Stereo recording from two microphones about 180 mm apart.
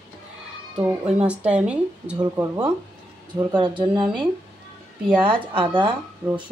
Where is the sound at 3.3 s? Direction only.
25° right (ahead or behind).